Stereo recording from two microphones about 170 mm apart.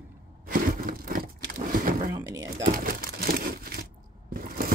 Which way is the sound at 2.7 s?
60° right (ahead or behind).